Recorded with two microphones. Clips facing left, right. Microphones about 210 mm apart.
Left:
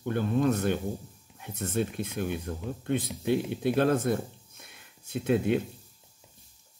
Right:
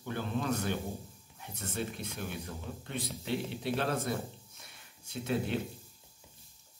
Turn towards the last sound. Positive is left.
turn(degrees=55)  # may be behind; listen again after turning